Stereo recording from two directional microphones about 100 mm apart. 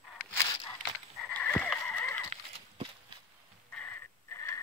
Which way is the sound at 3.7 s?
25° left (ahead or behind).